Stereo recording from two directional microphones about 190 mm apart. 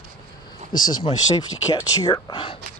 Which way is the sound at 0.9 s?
25° left (ahead or behind).